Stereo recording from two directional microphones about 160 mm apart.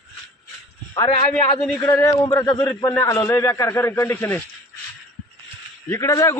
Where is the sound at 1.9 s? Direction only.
20° left (ahead or behind).